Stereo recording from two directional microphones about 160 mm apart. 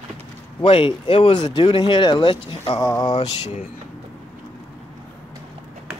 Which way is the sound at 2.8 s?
20° left (ahead or behind).